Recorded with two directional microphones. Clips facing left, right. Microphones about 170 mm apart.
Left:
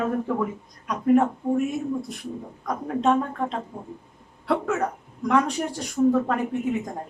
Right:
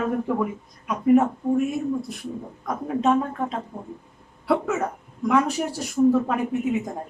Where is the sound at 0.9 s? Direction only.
5° right (ahead or behind).